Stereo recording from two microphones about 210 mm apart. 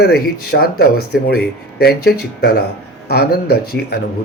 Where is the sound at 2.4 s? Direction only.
50° left (ahead or behind).